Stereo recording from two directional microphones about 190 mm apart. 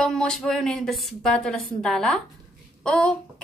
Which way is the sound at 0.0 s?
5° left (ahead or behind).